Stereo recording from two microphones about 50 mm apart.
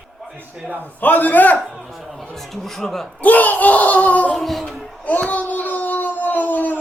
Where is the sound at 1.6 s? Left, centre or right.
Centre.